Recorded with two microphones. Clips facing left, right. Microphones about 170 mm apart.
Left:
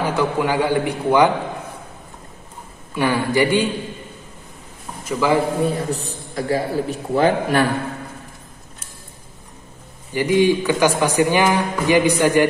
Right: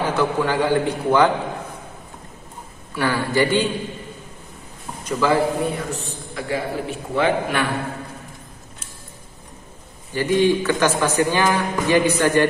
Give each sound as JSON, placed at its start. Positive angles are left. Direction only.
{"t": 0.0, "sound": "speech", "side_deg": 10}
{"t": 2.9, "sound": "speech", "side_deg": 15}
{"t": 5.0, "sound": "a man's voice", "side_deg": 10}
{"t": 5.7, "sound": "a man's voice", "side_deg": 35}
{"t": 10.1, "sound": "speech", "side_deg": 15}